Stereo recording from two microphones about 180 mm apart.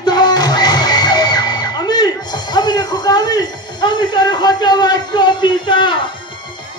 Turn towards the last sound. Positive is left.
turn(degrees=25)  # may be behind; listen again after turning